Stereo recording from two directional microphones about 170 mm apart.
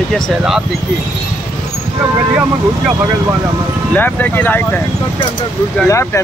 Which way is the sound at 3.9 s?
10° left (ahead or behind).